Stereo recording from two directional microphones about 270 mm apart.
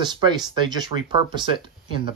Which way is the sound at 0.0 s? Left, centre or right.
Centre.